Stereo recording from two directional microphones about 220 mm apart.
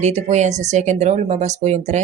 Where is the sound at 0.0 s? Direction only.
30° right (ahead or behind).